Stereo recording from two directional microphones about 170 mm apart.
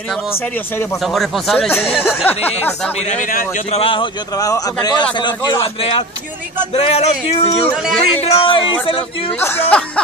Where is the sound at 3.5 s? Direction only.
40° left (ahead or behind).